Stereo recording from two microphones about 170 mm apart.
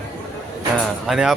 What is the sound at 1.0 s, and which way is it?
Speech, centre (ahead or behind).